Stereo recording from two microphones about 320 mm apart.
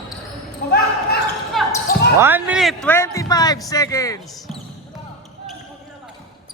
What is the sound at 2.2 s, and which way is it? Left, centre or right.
A man's voice, centre.